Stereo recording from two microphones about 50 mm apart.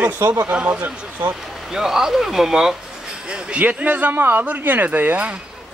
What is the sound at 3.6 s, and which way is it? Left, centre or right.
Speech, right.